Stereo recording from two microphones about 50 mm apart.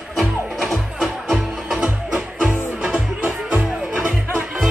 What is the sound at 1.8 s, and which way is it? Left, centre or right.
Music, right.